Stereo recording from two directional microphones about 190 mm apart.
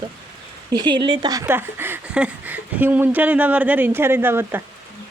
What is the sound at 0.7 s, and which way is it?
Speech, 25° right (ahead or behind).